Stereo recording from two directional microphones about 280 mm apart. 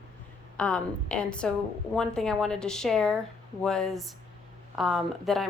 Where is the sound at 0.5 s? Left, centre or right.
Centre.